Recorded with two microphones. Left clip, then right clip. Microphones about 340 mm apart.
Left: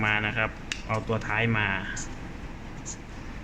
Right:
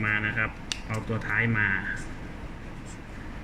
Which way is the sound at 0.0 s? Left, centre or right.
Centre.